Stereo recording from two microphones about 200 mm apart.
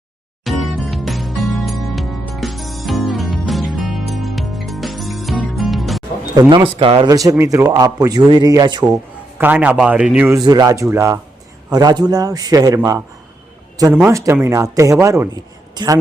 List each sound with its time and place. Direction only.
0.4 s music: centre (ahead or behind)
6.4 s a man's voice: 20° right (ahead or behind)
9.4 s a man's voice: 10° right (ahead or behind)
10.4 s a man's voice: 20° right (ahead or behind)
14.1 s a man's voice: 15° right (ahead or behind)